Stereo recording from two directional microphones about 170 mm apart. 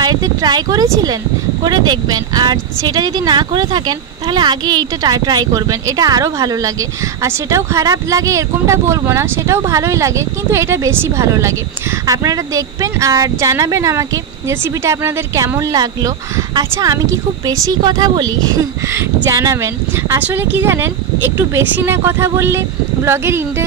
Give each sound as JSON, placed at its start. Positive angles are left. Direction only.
{"t": 0.0, "sound": "speech", "side_deg": -25}